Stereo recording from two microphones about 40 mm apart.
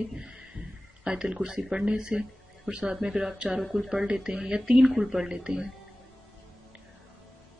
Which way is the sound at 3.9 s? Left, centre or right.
Right.